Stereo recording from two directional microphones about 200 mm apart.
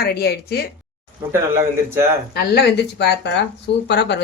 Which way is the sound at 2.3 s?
55° left (ahead or behind).